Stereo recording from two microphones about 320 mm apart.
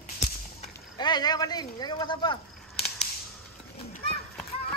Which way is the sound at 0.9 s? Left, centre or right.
Centre.